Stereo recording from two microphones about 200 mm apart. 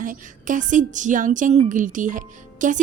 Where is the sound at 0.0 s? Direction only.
40° right (ahead or behind).